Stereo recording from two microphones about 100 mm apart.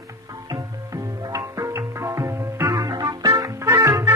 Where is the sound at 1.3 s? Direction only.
30° right (ahead or behind).